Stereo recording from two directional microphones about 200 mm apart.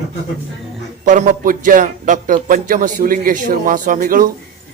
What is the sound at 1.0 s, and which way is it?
A man's voice, 40° right (ahead or behind).